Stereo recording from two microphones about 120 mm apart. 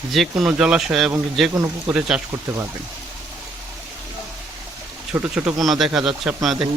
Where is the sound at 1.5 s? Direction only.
25° right (ahead or behind).